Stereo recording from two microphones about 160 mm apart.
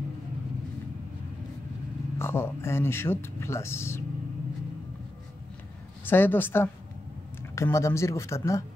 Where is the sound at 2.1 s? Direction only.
15° left (ahead or behind).